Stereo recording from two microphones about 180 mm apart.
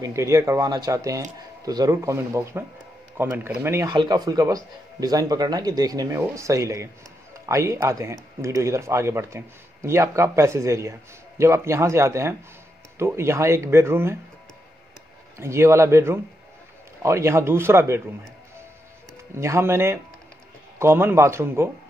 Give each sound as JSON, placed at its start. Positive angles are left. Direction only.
{"t": 0.0, "sound": "speech", "side_deg": -15}
{"t": 15.3, "sound": "speech", "side_deg": -15}
{"t": 19.3, "sound": "speech", "side_deg": -15}